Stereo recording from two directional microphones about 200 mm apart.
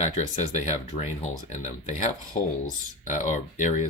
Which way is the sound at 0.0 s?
35° left (ahead or behind).